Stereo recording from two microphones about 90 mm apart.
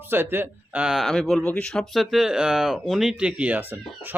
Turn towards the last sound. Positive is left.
turn(degrees=-15)  # may be behind; listen again after turning